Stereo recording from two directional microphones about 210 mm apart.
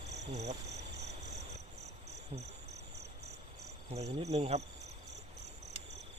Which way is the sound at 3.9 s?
30° right (ahead or behind).